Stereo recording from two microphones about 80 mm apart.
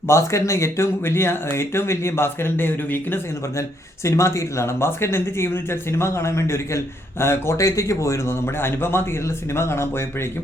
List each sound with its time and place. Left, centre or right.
0.1 s a man's voice: left
4.0 s a man's voice: left